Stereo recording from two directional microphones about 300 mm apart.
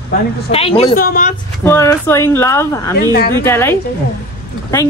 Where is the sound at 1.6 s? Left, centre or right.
Centre.